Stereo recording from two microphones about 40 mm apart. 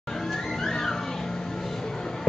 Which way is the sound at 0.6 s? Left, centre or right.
Centre.